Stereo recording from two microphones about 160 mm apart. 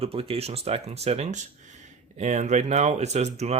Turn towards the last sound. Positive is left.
turn(degrees=-45)  # may be behind; listen again after turning